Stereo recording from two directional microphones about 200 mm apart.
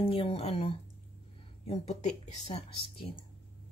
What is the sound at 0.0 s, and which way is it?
Speech, 25° left (ahead or behind).